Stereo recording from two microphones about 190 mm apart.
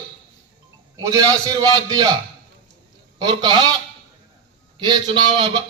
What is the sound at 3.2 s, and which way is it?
Speech, 20° right (ahead or behind).